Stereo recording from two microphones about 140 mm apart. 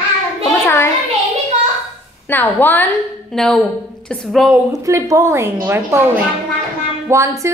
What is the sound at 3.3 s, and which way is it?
A woman's voice, centre (ahead or behind).